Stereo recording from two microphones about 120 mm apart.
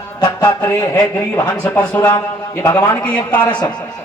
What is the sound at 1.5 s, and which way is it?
Speech, 10° left (ahead or behind).